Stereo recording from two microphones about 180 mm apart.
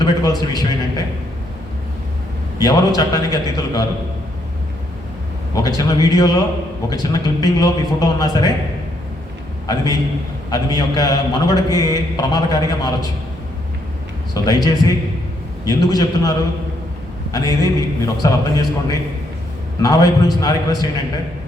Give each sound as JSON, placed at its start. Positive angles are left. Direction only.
{"t": 0.0, "sound": "a man's voice", "side_deg": 20}
{"t": 2.6, "sound": "a man's voice", "side_deg": 20}
{"t": 5.6, "sound": "a man's voice", "side_deg": 20}
{"t": 9.6, "sound": "a man's voice", "side_deg": 20}
{"t": 14.4, "sound": "a man's voice", "side_deg": 20}
{"t": 17.3, "sound": "a man's voice", "side_deg": 20}